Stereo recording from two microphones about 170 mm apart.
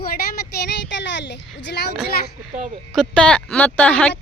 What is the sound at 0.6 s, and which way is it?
A child's voice, 90° left.